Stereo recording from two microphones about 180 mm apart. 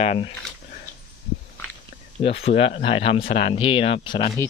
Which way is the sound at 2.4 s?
35° left (ahead or behind).